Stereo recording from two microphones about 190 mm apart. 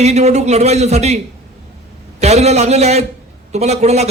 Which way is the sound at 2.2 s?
35° right (ahead or behind).